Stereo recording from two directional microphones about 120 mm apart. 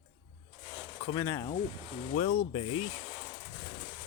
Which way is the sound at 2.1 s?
55° left (ahead or behind).